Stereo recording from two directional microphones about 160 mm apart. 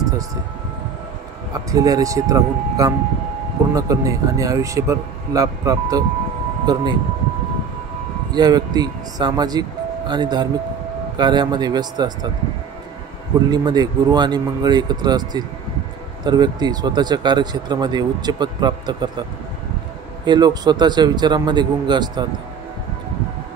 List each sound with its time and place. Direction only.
1.5 s speech: 20° right (ahead or behind)
8.3 s speech: 25° right (ahead or behind)
13.5 s speech: 25° right (ahead or behind)
20.2 s speech: 25° right (ahead or behind)